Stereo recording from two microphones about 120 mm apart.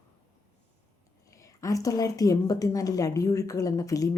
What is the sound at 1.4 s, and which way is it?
A woman's voice, 30° left (ahead or behind).